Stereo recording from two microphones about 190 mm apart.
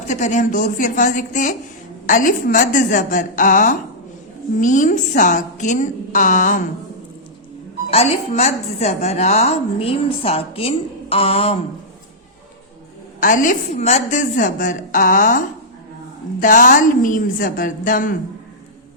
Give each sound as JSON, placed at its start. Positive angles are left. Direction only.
{"t": 0.1, "sound": "a woman's voice", "side_deg": 40}
{"t": 7.9, "sound": "a woman's voice", "side_deg": 30}
{"t": 13.1, "sound": "a woman's voice", "side_deg": 45}
{"t": 16.4, "sound": "a woman's voice", "side_deg": 45}